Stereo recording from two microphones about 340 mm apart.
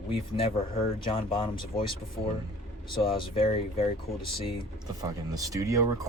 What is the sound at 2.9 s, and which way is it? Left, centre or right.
Speech, centre.